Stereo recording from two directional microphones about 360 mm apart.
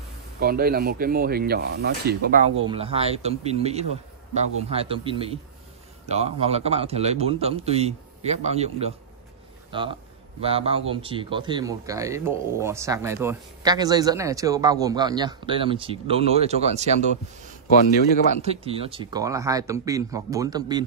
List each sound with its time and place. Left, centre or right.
0.4 s speech: right
17.7 s a man's voice: left
18.4 s speech: centre